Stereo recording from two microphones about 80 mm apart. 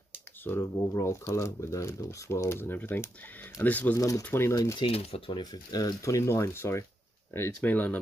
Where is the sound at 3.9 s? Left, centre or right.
Left.